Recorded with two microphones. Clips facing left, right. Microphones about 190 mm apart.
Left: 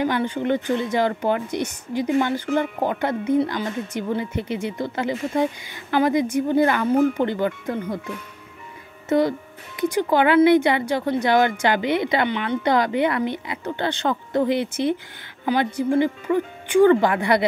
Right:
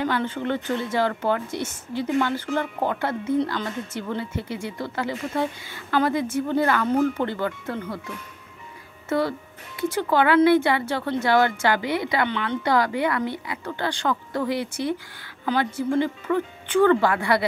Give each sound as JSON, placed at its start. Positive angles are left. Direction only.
{"t": 0.0, "sound": "a woman's voice", "side_deg": 15}
{"t": 9.1, "sound": "a woman's voice", "side_deg": 20}